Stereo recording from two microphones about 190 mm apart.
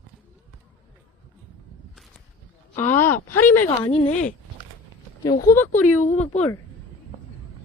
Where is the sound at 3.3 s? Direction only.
10° left (ahead or behind).